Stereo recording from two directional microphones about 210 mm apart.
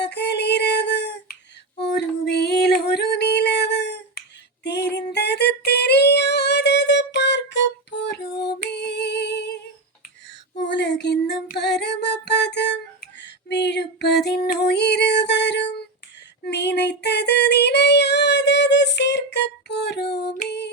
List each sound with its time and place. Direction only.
0.0 s female singing: 55° left (ahead or behind)
1.8 s music: 50° left (ahead or behind)
4.6 s female singing: 55° left (ahead or behind)
8.4 s music: 50° left (ahead or behind)
10.6 s female singing: 55° left (ahead or behind)
14.3 s music: 50° left (ahead or behind)
16.5 s female singing: 55° left (ahead or behind)